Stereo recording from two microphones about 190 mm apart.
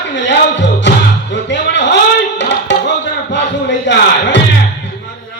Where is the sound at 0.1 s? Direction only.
70° left (ahead or behind).